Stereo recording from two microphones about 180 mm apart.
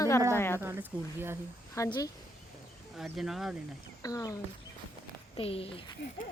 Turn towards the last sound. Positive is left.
turn(degrees=80)